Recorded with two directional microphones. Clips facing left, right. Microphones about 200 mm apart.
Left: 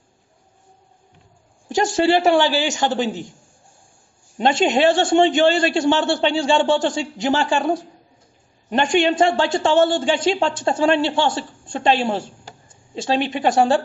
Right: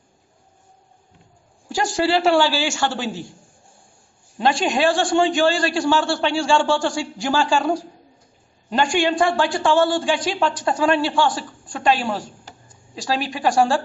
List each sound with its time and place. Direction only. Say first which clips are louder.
1.7 s a woman's voice: left 3 dB; 20° left (ahead or behind)
4.4 s a woman's voice: left 3 dB; 20° left (ahead or behind)